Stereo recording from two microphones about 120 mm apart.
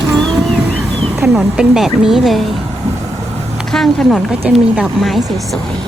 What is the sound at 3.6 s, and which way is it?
Speech, 5° left (ahead or behind).